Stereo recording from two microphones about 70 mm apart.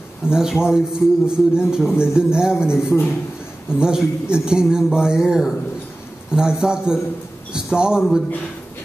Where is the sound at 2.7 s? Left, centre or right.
Left.